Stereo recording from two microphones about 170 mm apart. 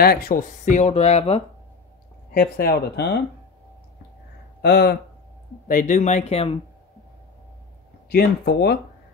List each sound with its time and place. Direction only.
0.0 s speech: 60° left (ahead or behind); by 1.4 s 40° left (ahead or behind)
2.3 s speech: 65° left (ahead or behind)
4.6 s speech: 75° left (ahead or behind)
5.7 s speech: 50° left (ahead or behind); by 6.6 s 35° left (ahead or behind)
8.1 s speech: 70° left (ahead or behind)